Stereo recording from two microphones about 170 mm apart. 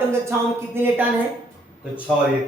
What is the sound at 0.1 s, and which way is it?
Speech, 15° right (ahead or behind).